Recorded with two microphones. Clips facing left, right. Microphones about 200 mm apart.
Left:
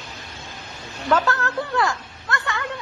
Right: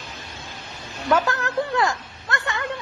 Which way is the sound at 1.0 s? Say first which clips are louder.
Even; 15° right (ahead or behind).